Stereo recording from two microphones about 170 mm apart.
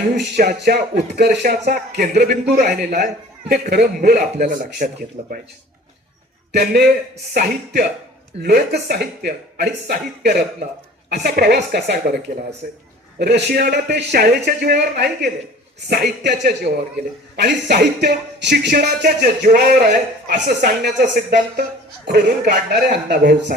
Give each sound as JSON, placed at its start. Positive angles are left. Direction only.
{"t": 0.3, "sound": "a man's voice", "side_deg": -65}
{"t": 1.2, "sound": "speech", "side_deg": -80}
{"t": 2.0, "sound": "a man's voice", "side_deg": -65}
{"t": 3.5, "sound": "a man's voice", "side_deg": -70}
{"t": 6.5, "sound": "a man's voice", "side_deg": -75}
{"t": 12.6, "sound": "a man's voice", "side_deg": -55}
{"t": 13.1, "sound": "a man's voice", "side_deg": -75}
{"t": 18.7, "sound": "a man's voice", "side_deg": -60}
{"t": 21.0, "sound": "a man's voice", "side_deg": -60}
{"t": 22.0, "sound": "a man's voice", "side_deg": -80}